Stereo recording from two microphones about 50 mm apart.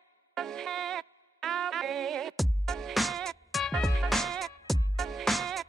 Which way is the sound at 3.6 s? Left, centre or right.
Centre.